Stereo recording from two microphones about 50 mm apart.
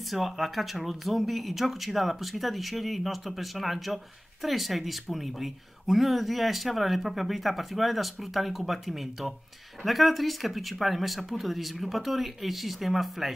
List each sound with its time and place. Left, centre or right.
0.1 s speech: centre